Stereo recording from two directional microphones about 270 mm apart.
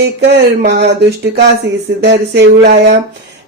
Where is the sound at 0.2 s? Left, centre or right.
Right.